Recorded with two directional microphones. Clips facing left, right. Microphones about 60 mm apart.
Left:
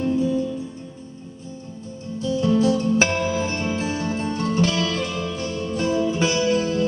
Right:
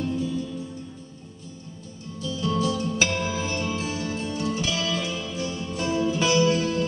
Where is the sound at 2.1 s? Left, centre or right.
Left.